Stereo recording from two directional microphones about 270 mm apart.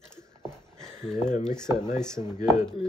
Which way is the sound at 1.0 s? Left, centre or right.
Left.